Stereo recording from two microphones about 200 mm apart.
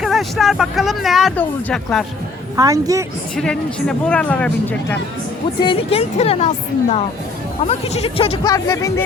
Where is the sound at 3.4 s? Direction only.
5° left (ahead or behind).